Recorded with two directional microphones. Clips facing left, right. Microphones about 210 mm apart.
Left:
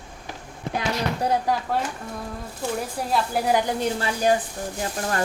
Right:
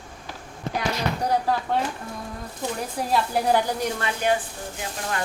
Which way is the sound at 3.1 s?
10° left (ahead or behind).